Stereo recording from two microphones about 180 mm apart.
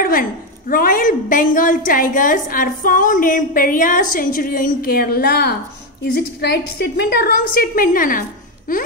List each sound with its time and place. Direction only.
0.0 s a woman's voice: 50° left (ahead or behind)
7.0 s a woman's voice: 60° left (ahead or behind)